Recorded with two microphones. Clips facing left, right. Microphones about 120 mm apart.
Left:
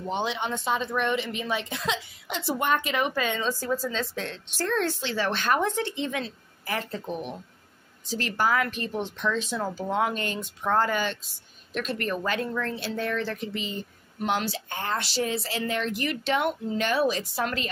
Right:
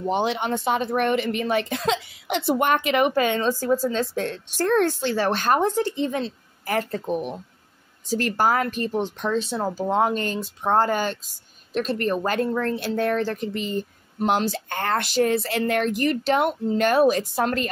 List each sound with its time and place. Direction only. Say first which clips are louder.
0.1 s speech: right 5 dB; 55° right (ahead or behind)
14.7 s speech: right 5 dB; 60° right (ahead or behind)